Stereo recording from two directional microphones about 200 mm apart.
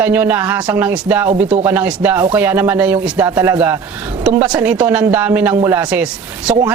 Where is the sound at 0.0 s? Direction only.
10° right (ahead or behind).